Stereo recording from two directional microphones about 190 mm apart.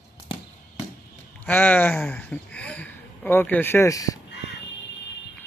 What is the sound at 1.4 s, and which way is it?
Speech, 10° left (ahead or behind).